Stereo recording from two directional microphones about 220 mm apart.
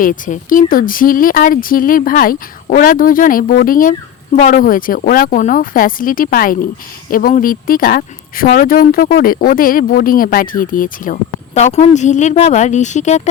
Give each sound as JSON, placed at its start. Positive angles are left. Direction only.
{"t": 0.0, "sound": "speech", "side_deg": 40}